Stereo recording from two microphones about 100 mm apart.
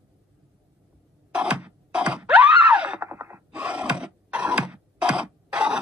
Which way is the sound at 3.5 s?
10° right (ahead or behind).